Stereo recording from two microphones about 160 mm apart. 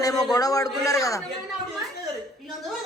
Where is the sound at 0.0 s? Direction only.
20° left (ahead or behind).